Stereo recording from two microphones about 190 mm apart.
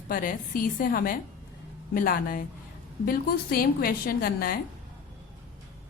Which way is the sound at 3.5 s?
50° left (ahead or behind).